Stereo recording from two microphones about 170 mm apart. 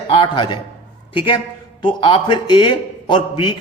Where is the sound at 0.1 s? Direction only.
30° left (ahead or behind).